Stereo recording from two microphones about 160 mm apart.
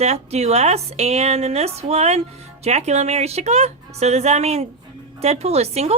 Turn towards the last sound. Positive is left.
turn(degrees=-40)  # may be behind; listen again after turning